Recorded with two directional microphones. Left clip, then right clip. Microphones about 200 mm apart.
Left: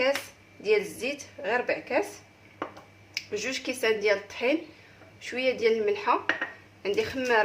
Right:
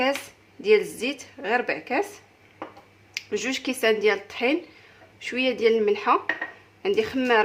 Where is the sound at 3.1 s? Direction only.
40° right (ahead or behind).